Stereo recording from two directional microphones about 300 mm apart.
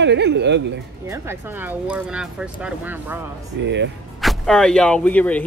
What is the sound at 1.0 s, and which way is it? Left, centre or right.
Speech, centre.